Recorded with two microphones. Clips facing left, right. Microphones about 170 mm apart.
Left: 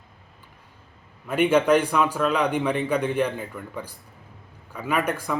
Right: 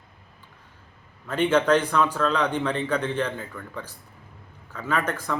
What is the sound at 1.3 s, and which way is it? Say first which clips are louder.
A man's voice: left 2 dB; 10° left (ahead or behind).